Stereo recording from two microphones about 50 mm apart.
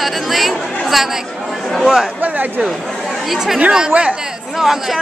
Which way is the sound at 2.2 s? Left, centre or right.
Right.